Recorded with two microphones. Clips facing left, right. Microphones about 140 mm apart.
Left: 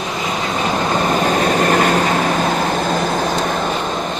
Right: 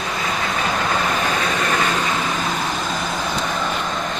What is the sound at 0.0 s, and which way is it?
Vehicle, 20° left (ahead or behind).